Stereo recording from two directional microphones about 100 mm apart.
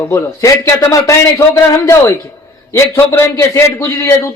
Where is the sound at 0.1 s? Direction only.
35° left (ahead or behind).